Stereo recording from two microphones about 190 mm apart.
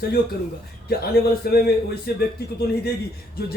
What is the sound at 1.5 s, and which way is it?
Speech, 55° left (ahead or behind).